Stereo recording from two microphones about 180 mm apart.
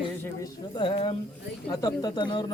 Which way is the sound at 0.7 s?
30° left (ahead or behind).